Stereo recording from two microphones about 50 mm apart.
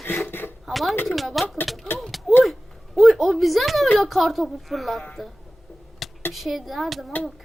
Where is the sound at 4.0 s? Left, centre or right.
Centre.